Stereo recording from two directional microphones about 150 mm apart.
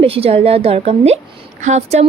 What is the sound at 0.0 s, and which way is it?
A woman's voice, 40° right (ahead or behind).